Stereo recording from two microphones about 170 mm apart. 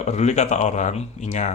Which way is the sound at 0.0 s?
40° left (ahead or behind).